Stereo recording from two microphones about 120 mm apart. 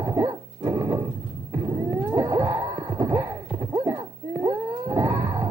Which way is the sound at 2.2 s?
20° right (ahead or behind).